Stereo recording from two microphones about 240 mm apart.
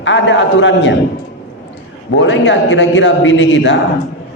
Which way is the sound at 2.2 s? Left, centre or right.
Left.